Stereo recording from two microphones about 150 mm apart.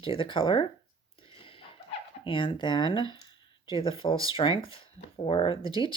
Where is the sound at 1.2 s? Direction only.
35° left (ahead or behind).